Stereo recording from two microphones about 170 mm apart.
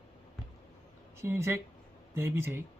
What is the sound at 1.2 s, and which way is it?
Speech, 15° right (ahead or behind).